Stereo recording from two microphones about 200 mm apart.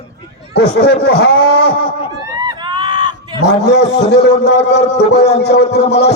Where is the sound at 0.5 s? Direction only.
55° left (ahead or behind).